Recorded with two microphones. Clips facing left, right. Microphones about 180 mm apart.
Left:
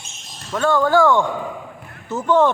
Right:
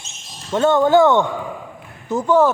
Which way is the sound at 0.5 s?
25° right (ahead or behind).